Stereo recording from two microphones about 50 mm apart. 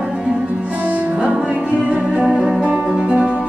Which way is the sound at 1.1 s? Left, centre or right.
Centre.